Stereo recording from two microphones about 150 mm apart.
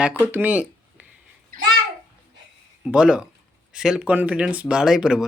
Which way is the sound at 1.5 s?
70° right (ahead or behind).